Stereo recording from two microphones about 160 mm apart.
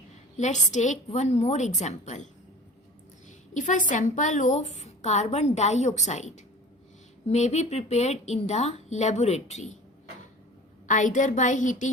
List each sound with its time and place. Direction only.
0.3 s a woman's voice: 50° left (ahead or behind)
10.8 s a woman's voice: 50° left (ahead or behind)